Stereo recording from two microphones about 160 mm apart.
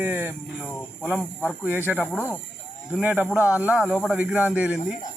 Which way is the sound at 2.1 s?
10° left (ahead or behind).